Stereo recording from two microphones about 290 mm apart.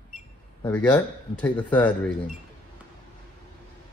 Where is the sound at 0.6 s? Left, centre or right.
Centre.